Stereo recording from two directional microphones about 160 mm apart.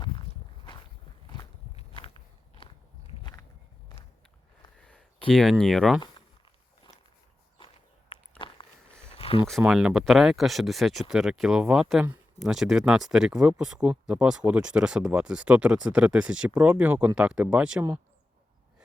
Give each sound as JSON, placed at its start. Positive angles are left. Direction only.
{"t": 0.3, "sound": "walk", "side_deg": 40}
{"t": 2.0, "sound": "biting", "side_deg": 35}
{"t": 4.8, "sound": "a sound", "side_deg": 5}
{"t": 5.3, "sound": "speech", "side_deg": 0}
{"t": 8.4, "sound": "a sound", "side_deg": 30}
{"t": 9.6, "sound": "speech", "side_deg": -5}